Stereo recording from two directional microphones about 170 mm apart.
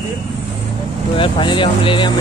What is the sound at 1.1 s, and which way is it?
Speech, 30° left (ahead or behind).